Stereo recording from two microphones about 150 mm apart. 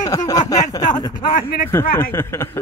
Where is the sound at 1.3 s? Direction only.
70° left (ahead or behind).